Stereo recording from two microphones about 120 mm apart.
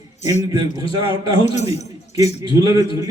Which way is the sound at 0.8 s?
50° left (ahead or behind).